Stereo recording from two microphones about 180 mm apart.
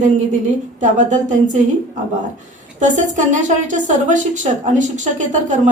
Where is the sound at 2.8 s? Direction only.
45° right (ahead or behind).